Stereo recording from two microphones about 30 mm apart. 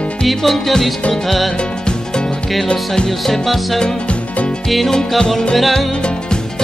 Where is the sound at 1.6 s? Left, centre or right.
Left.